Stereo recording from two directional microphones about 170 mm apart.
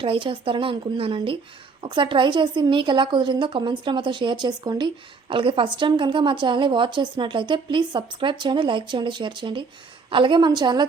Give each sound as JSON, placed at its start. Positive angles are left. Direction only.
{"t": 0.0, "sound": "a woman's voice", "side_deg": -30}